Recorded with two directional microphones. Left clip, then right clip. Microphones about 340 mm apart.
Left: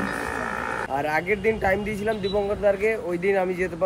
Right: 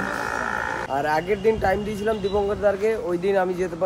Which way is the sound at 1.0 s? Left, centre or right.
Centre.